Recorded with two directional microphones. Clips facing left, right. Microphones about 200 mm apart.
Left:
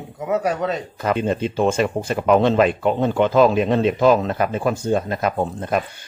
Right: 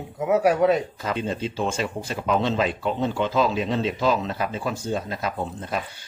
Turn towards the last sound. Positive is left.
turn(degrees=55)  # may be behind; listen again after turning